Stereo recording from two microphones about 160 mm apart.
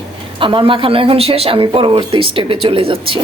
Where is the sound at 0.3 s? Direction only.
35° right (ahead or behind).